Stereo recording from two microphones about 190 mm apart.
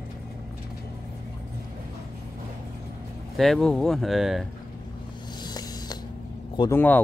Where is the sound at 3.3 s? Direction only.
Centre (ahead or behind).